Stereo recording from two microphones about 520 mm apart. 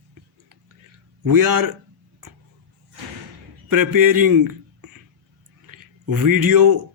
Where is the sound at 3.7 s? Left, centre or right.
Right.